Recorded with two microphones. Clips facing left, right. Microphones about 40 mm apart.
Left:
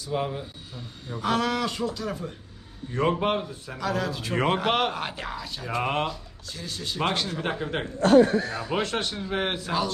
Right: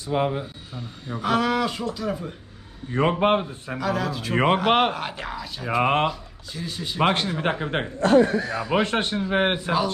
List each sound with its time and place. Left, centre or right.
0.0 s speech: right
1.2 s speech: centre
2.9 s speech: right
3.8 s speech: centre
4.4 s speech: centre
4.9 s speech: centre
5.6 s speech: right
6.1 s speech: centre
8.0 s speech: right
8.7 s speech: right